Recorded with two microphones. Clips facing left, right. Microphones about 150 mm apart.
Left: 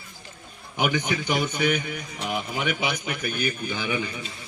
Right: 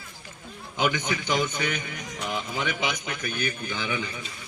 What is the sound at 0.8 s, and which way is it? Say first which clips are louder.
A man's voice: left 1 dB; 15° left (ahead or behind).